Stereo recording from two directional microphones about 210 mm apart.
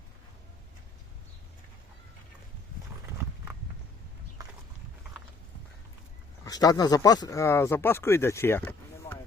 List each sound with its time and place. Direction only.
4.4 s horse: 15° right (ahead or behind)
6.4 s speech: 15° left (ahead or behind)